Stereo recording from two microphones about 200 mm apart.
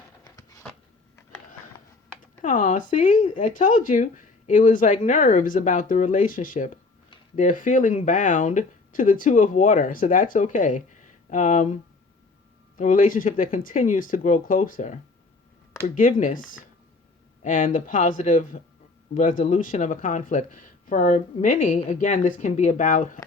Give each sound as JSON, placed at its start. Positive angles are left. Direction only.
{"t": 2.4, "sound": "speech", "side_deg": 40}
{"t": 16.0, "sound": "speech", "side_deg": 40}
{"t": 17.4, "sound": "speech", "side_deg": 40}